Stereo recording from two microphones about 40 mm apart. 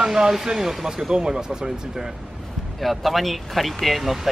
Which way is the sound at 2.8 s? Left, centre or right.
Centre.